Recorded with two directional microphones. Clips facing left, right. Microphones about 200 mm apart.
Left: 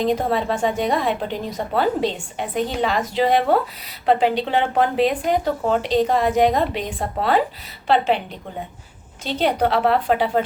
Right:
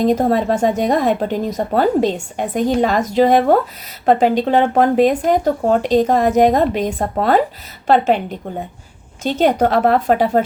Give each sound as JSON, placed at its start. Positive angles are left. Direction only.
{"t": 0.0, "sound": "speech", "side_deg": -45}
{"t": 9.2, "sound": "speech", "side_deg": -45}